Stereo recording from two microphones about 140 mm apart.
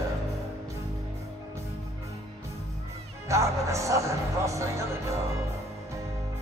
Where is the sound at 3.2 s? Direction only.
20° right (ahead or behind).